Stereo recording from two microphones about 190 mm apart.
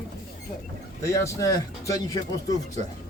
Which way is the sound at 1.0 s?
15° left (ahead or behind).